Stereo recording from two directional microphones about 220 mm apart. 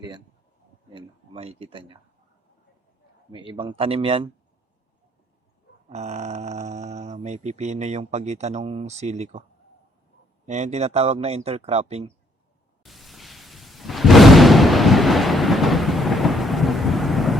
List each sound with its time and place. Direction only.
0.9 s a man's voice: 25° right (ahead or behind)
3.3 s a man's voice: 20° right (ahead or behind)
5.9 s speech: 30° right (ahead or behind)
10.4 s a man's voice: 30° right (ahead or behind)
12.8 s a sound: centre (ahead or behind)